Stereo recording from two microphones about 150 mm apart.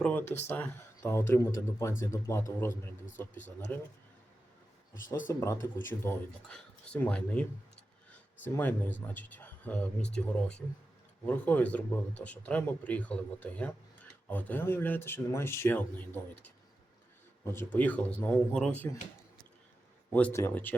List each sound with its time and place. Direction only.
0.0 s speech: 10° left (ahead or behind)
3.3 s speech: 55° left (ahead or behind)
5.0 s speech: 60° left (ahead or behind)
5.3 s speech: 20° left (ahead or behind)
8.5 s speech: 10° left (ahead or behind)
17.4 s speech: 15° left (ahead or behind)
20.3 s speech: 15° left (ahead or behind)